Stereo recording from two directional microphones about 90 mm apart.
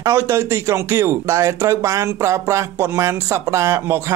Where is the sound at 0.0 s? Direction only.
35° right (ahead or behind).